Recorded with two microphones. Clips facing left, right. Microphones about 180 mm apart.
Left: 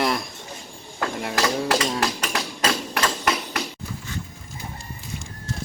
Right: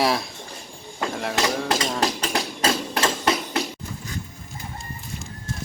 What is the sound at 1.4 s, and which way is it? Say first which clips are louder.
Hammer: left 2 dB; 25° right (ahead or behind).